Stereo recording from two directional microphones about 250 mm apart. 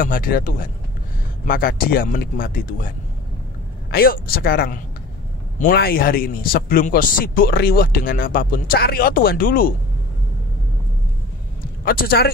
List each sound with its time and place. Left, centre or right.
0.0 s speech: left
3.9 s speech: left
11.8 s speech: left